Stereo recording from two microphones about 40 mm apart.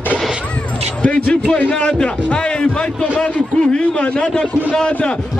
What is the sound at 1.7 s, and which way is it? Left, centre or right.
A man's voice, left.